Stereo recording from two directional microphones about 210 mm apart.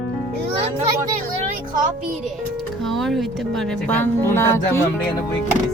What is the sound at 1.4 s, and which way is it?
Music, 35° right (ahead or behind).